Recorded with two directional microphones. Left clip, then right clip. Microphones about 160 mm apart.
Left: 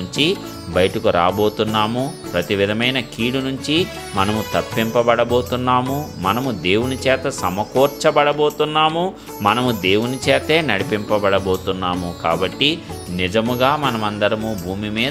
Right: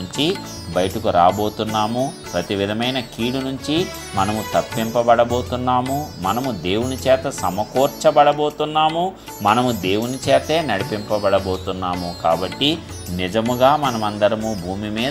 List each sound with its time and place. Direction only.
0.2 s speech: 25° left (ahead or behind)